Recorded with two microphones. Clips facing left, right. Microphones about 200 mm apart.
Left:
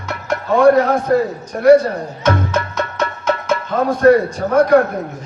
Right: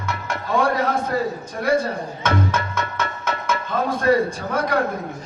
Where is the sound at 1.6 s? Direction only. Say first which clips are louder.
Left 11 dB; 60° left (ahead or behind).